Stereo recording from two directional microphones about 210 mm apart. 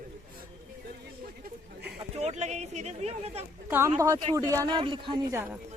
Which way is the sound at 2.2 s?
30° right (ahead or behind).